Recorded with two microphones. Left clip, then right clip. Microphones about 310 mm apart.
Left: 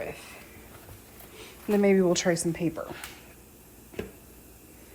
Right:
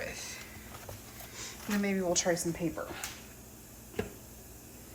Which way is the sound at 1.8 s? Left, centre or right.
Centre.